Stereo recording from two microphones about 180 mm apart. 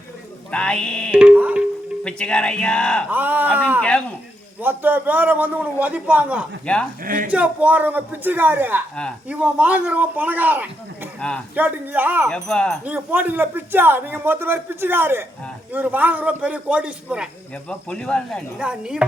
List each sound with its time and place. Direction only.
0.5 s speech: 5° left (ahead or behind)
1.1 s a man's voice: 5° right (ahead or behind)
2.0 s speech: 5° left (ahead or behind)
3.1 s a man's voice: 10° right (ahead or behind)
3.8 s speech: 5° left (ahead or behind)
4.6 s a man's voice: 10° right (ahead or behind)
6.7 s speech: 5° left (ahead or behind)
7.0 s speech: 50° right (ahead or behind)
7.3 s a man's voice: 10° right (ahead or behind)
11.2 s speech: 5° left (ahead or behind)
11.5 s a man's voice: 10° right (ahead or behind)
12.3 s speech: 5° left (ahead or behind)
12.8 s a man's voice: 10° right (ahead or behind)
17.7 s speech: 5° left (ahead or behind)